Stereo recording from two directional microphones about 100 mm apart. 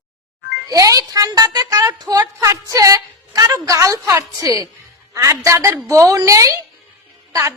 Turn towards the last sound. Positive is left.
turn(degrees=-30)  # may be behind; listen again after turning